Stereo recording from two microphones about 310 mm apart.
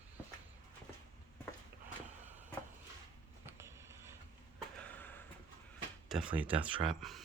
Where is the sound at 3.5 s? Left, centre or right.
Centre.